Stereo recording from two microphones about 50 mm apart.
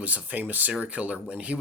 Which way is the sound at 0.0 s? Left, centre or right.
Right.